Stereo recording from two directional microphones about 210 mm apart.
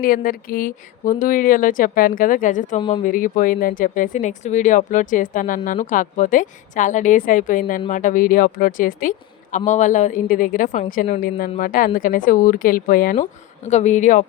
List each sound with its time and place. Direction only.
0.0 s speech: 40° left (ahead or behind)